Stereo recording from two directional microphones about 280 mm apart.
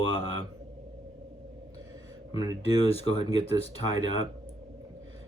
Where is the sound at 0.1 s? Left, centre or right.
Centre.